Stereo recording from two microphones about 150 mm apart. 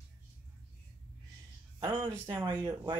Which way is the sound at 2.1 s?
20° right (ahead or behind).